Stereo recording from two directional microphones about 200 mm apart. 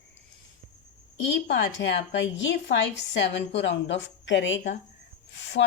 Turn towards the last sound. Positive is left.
turn(degrees=60)  # may be behind; listen again after turning